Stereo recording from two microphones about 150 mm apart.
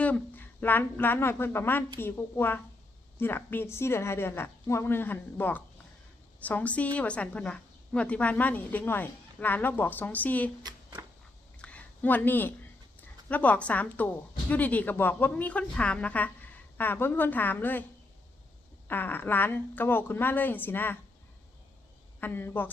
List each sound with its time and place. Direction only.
0.0 s a woman's voice: 10° left (ahead or behind)
10.6 s a sound: 30° right (ahead or behind)
11.5 s a sound: 10° left (ahead or behind)
13.0 s a woman's voice: 10° left (ahead or behind)
18.9 s a woman's voice: 15° left (ahead or behind)
22.2 s a woman's voice: 15° left (ahead or behind)